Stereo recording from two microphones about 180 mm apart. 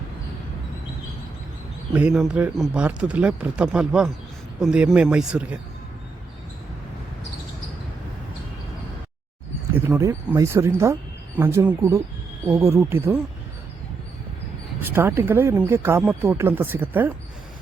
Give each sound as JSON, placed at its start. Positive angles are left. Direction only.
{"t": 1.9, "sound": "speech", "side_deg": -5}
{"t": 10.0, "sound": "speech", "side_deg": -15}
{"t": 14.8, "sound": "speech", "side_deg": -15}